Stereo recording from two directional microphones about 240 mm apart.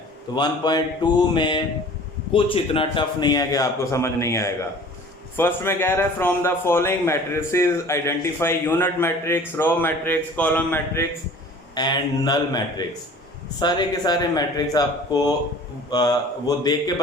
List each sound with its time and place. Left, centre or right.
0.3 s mantra: centre
2.3 s a man's voice: left